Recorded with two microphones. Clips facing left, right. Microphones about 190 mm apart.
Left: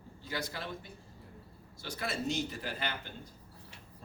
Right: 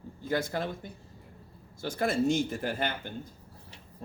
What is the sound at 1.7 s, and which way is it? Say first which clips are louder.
A man's voice: right 9 dB; 50° right (ahead or behind).